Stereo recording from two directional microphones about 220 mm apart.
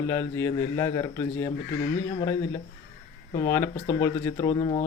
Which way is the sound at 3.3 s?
15° left (ahead or behind).